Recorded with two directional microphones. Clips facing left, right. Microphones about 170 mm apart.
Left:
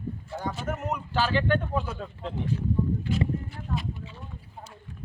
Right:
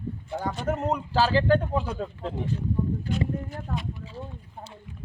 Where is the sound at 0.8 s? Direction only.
30° right (ahead or behind).